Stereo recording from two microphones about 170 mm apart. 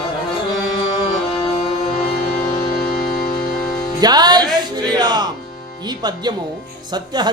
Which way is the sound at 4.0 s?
25° right (ahead or behind).